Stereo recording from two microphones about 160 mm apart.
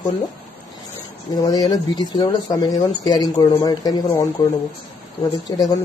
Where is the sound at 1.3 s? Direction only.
25° left (ahead or behind).